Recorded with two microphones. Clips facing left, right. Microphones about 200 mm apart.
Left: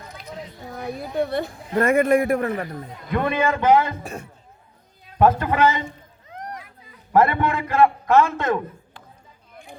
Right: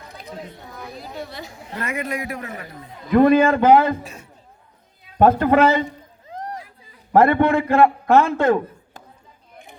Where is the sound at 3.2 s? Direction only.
40° right (ahead or behind).